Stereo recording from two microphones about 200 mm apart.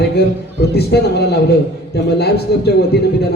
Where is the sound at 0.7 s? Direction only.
55° left (ahead or behind).